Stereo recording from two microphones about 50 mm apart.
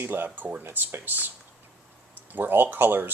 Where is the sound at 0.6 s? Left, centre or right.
Right.